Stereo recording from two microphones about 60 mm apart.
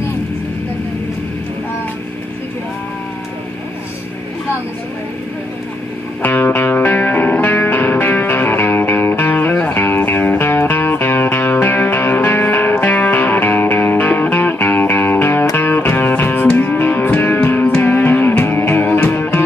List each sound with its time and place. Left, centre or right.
6.2 s music: left